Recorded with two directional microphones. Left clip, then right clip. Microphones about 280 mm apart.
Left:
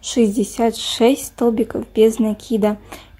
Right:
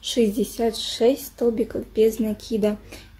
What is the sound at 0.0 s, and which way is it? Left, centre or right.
A woman's voice, left.